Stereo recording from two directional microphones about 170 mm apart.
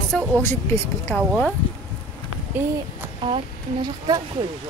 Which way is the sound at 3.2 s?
30° right (ahead or behind).